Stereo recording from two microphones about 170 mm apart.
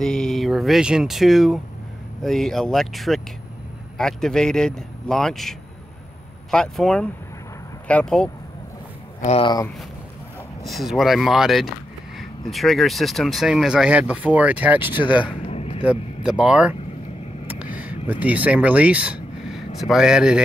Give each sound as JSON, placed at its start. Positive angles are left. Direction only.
{"t": 0.0, "sound": "speech", "side_deg": 0}
{"t": 9.3, "sound": "speech", "side_deg": 25}
{"t": 10.6, "sound": "speech", "side_deg": 0}
{"t": 14.9, "sound": "speech", "side_deg": 30}
{"t": 15.4, "sound": "vehicle", "side_deg": 35}
{"t": 15.8, "sound": "speech", "side_deg": -5}